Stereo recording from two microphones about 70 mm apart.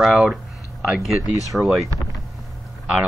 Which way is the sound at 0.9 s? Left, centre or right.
Centre.